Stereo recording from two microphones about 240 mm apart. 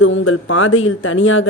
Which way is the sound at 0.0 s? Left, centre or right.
Left.